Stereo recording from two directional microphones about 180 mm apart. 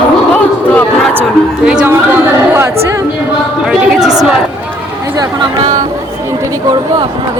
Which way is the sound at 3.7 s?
5° right (ahead or behind).